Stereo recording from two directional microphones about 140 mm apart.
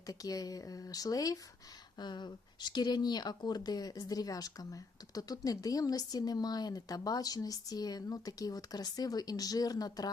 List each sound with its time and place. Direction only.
0.1 s speech: 25° left (ahead or behind)